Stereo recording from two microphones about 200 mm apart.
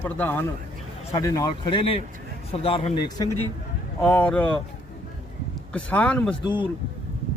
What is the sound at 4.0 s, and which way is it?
Speech, 5° left (ahead or behind).